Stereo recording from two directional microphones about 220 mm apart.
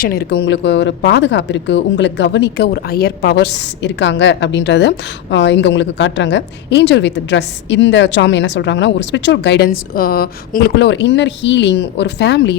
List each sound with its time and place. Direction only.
0.0 s speech: 45° left (ahead or behind)